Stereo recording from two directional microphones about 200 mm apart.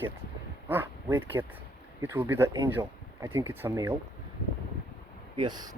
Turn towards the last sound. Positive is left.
turn(degrees=-20)  # may be behind; listen again after turning